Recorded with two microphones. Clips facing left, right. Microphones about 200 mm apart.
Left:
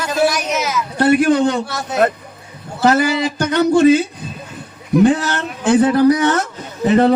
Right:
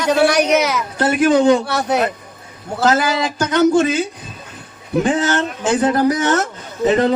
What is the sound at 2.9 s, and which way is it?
Speech, 60° left (ahead or behind).